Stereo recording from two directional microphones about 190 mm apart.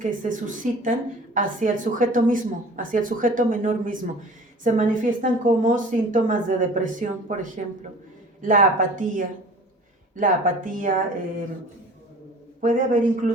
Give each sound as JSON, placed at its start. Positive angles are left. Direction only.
{"t": 0.0, "sound": "a woman's voice", "side_deg": -45}
{"t": 12.6, "sound": "a woman's voice", "side_deg": -45}